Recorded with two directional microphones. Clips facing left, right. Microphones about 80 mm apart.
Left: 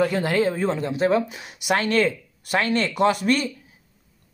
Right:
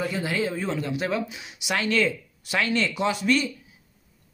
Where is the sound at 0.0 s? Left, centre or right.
Left.